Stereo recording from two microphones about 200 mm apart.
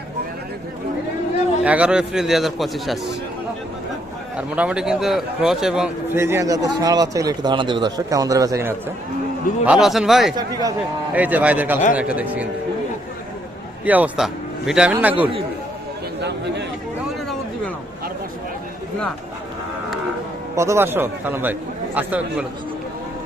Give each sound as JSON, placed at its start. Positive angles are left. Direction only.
{"t": 1.6, "sound": "speech", "side_deg": -5}
{"t": 4.4, "sound": "a man's voice", "side_deg": -5}
{"t": 9.6, "sound": "speech", "side_deg": 0}
{"t": 10.3, "sound": "speech", "side_deg": -20}
{"t": 11.1, "sound": "a man's voice", "side_deg": -10}
{"t": 13.8, "sound": "a man's voice", "side_deg": -10}
{"t": 20.6, "sound": "a man's voice", "side_deg": -15}